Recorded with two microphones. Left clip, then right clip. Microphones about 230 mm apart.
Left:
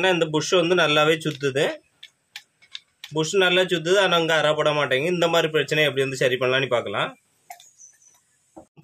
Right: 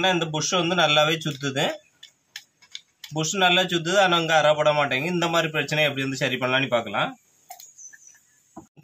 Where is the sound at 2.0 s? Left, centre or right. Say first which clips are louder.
Left 1 dB; centre.